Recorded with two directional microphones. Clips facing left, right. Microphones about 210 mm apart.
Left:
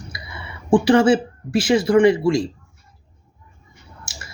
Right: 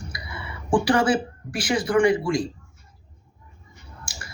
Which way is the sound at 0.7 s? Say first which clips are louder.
Left 6 dB; 25° left (ahead or behind).